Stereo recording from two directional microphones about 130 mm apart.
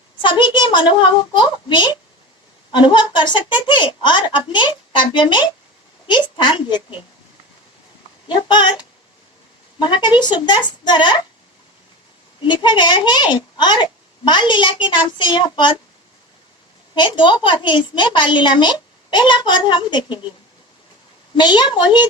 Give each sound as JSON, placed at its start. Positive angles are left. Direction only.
{"t": 0.2, "sound": "a child's voice", "side_deg": 35}
{"t": 8.3, "sound": "a woman's voice", "side_deg": 35}
{"t": 9.7, "sound": "a woman's voice", "side_deg": 35}
{"t": 12.5, "sound": "a woman's voice", "side_deg": 35}
{"t": 16.9, "sound": "a woman's voice", "side_deg": 40}
{"t": 21.3, "sound": "a woman's voice", "side_deg": 35}